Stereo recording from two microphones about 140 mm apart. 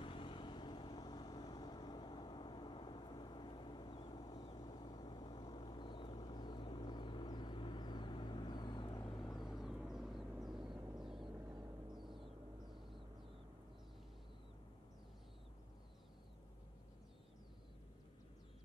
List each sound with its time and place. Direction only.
0.0 s vehicle: 40° left (ahead or behind)
9.1 s vehicle: centre (ahead or behind)
11.9 s gong: centre (ahead or behind)